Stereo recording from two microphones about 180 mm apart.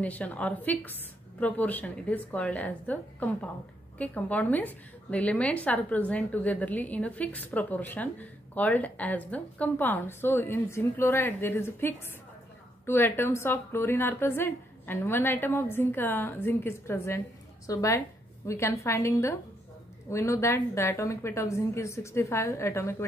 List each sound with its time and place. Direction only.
0.0 s a woman's voice: 10° left (ahead or behind)